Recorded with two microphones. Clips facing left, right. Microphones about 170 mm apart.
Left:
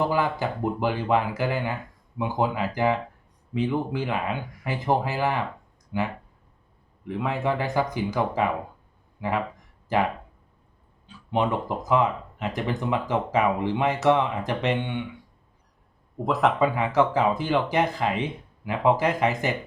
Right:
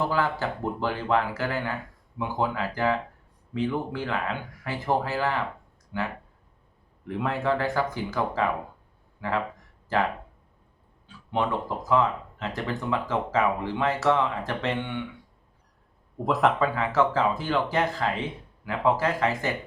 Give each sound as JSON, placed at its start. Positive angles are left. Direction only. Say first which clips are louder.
{"t": 0.0, "sound": "speech", "louder": "left 2 dB", "side_deg": 15}
{"t": 7.1, "sound": "speech", "louder": "left 1 dB", "side_deg": 0}
{"t": 7.4, "sound": "speech", "louder": "even", "side_deg": 15}
{"t": 11.3, "sound": "speech", "louder": "left 2 dB", "side_deg": 15}
{"t": 16.1, "sound": "speech", "louder": "even", "side_deg": 0}
{"t": 16.6, "sound": "speech", "louder": "left 2 dB", "side_deg": 15}